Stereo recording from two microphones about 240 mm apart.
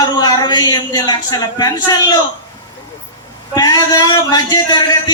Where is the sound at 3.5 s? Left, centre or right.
Centre.